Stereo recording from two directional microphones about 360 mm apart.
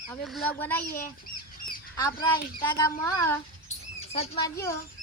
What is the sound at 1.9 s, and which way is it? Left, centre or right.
Speech, centre.